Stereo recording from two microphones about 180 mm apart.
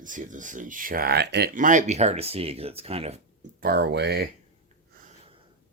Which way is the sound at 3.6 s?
60° right (ahead or behind).